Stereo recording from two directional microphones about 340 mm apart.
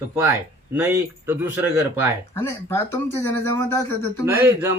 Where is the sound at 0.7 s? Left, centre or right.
Centre.